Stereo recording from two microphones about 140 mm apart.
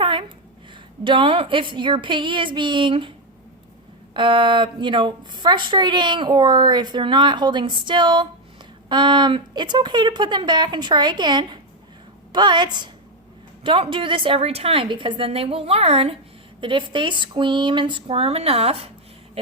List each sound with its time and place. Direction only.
0.0 s a sound: 35° right (ahead or behind)
1.0 s a woman's voice: 35° right (ahead or behind)
4.1 s a woman's voice: 35° right (ahead or behind)
16.6 s a woman's voice: 35° right (ahead or behind)